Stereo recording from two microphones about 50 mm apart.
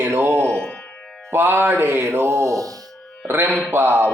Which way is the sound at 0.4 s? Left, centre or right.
Left.